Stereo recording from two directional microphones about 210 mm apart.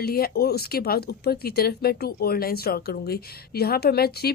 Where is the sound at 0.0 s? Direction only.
45° left (ahead or behind).